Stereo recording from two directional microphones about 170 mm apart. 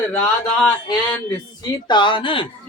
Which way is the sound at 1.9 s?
30° left (ahead or behind).